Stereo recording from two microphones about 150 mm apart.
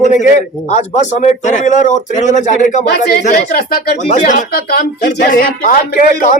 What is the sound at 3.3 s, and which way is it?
Speech, 90° left.